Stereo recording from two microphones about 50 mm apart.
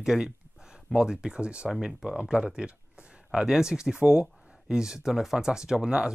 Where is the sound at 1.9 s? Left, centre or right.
Centre.